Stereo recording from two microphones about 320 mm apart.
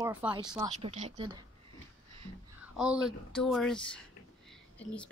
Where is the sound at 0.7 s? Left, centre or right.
Right.